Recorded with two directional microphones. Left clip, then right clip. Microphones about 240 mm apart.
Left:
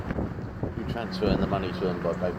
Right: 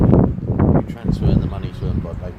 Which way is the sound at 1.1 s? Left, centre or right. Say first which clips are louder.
Right 2 dB; centre.